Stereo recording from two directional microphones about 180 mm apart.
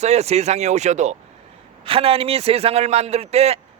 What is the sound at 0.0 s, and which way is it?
A man's voice, 35° right (ahead or behind).